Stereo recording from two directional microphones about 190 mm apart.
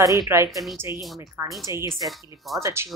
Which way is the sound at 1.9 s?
Centre (ahead or behind).